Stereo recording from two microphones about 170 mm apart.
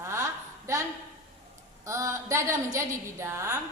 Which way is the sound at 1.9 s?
15° right (ahead or behind).